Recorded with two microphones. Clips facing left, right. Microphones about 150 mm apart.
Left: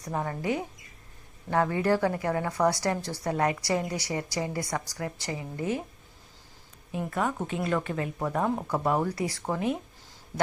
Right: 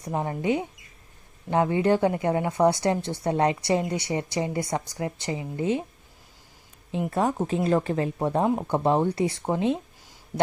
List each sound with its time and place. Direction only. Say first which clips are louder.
0.0 s a woman's voice: right 4 dB; 20° right (ahead or behind)
7.1 s a woman's voice: right 5 dB; 30° right (ahead or behind)